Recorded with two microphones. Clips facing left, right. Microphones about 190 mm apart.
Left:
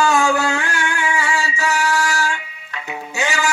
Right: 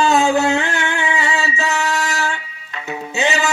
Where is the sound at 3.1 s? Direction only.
20° right (ahead or behind).